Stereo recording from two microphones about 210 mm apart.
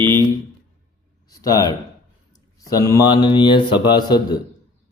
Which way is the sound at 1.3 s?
15° left (ahead or behind).